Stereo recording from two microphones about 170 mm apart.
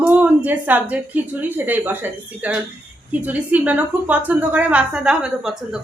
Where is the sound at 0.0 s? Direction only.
10° right (ahead or behind).